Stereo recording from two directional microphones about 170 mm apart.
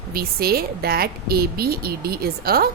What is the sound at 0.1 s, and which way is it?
A woman's voice, 60° right (ahead or behind).